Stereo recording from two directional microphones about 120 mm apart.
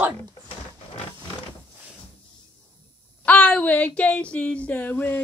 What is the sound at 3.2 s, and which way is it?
Speech, 10° left (ahead or behind).